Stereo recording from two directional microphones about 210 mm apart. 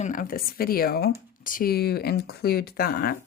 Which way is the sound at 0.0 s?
40° left (ahead or behind).